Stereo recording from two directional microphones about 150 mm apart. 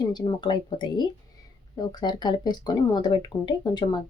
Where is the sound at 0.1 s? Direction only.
30° left (ahead or behind).